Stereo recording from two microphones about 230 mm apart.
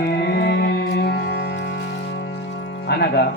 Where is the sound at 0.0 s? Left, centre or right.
Left.